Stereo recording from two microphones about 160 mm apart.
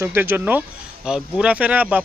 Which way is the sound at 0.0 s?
15° right (ahead or behind).